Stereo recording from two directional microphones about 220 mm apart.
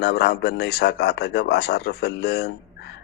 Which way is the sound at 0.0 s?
50° left (ahead or behind).